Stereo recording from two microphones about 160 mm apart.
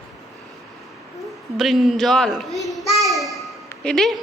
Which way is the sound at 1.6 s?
Centre (ahead or behind).